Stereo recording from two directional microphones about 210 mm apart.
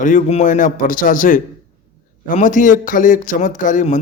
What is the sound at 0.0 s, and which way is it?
Speech, 35° left (ahead or behind).